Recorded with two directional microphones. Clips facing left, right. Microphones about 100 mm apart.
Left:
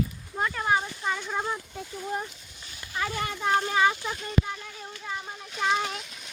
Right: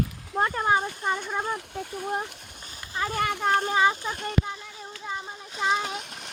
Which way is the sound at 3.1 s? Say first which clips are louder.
Right 2 dB; 55° right (ahead or behind).